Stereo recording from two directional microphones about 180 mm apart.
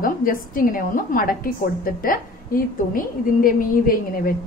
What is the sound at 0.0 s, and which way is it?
A woman's voice, 50° left (ahead or behind).